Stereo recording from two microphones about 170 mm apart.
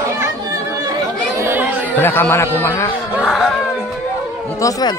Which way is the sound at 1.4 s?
10° right (ahead or behind).